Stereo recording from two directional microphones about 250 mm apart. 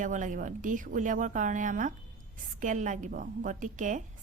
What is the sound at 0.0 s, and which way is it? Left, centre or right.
Speech, right.